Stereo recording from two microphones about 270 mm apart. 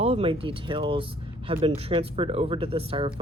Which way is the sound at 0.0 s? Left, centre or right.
Right.